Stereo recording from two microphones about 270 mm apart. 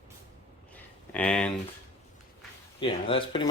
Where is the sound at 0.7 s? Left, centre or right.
Centre.